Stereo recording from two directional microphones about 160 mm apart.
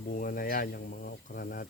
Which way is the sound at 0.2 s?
60° left (ahead or behind).